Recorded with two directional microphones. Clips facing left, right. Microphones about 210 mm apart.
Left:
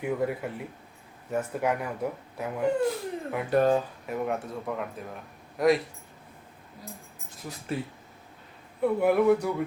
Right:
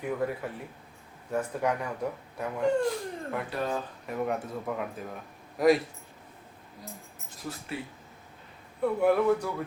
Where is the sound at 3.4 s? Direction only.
50° left (ahead or behind).